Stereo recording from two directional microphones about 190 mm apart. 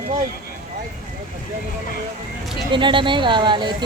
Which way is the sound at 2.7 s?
25° right (ahead or behind).